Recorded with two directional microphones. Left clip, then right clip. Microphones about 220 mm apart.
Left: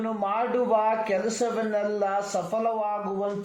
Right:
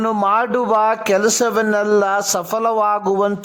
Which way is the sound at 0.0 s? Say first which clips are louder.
Right 11 dB; 45° right (ahead or behind).